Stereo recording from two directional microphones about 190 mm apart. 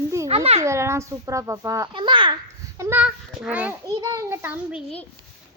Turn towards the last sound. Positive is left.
turn(degrees=-10)  # may be behind; listen again after turning